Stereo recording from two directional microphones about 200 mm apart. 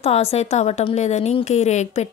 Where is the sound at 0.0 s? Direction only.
30° left (ahead or behind).